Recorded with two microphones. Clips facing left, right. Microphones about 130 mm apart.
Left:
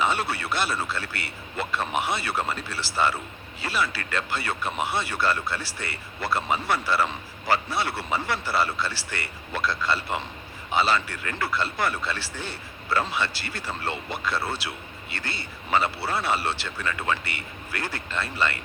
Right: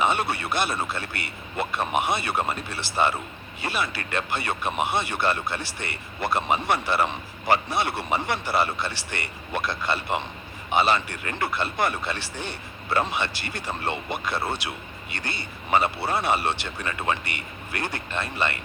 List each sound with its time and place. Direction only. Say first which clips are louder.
0.0 s speech: right 2 dB; 20° right (ahead or behind)